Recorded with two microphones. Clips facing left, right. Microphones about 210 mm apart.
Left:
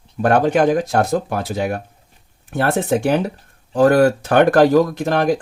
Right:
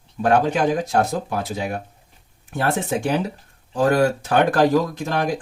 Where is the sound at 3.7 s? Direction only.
60° left (ahead or behind).